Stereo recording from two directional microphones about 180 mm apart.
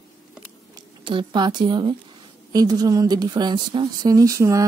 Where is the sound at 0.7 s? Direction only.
25° right (ahead or behind).